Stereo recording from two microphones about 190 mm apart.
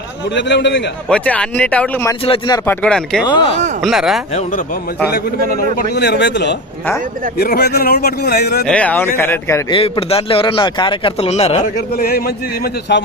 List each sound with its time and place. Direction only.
0.3 s a man's voice: 70° left (ahead or behind)
1.0 s speech: 5° left (ahead or behind)
2.2 s a man's voice: 30° left (ahead or behind)
2.6 s speech: 5° left (ahead or behind)
5.9 s a man's voice: 60° left (ahead or behind)
8.6 s speech: 5° left (ahead or behind)
9.7 s a man's voice: 30° left (ahead or behind)
11.9 s speech: 55° left (ahead or behind)